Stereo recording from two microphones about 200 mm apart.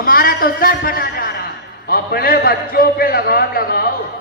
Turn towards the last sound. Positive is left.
turn(degrees=50)  # may be behind; listen again after turning